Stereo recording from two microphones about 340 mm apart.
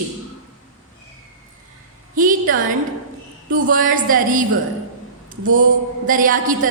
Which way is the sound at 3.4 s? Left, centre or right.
Right.